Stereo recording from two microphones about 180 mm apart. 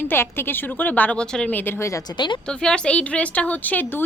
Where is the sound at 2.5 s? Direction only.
5° left (ahead or behind).